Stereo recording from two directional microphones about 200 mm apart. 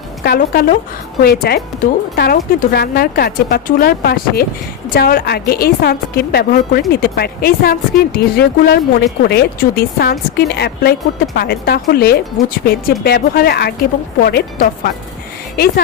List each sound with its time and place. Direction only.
0.2 s speech: 50° left (ahead or behind)